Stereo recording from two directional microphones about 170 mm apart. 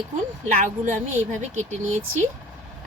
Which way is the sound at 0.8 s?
45° right (ahead or behind).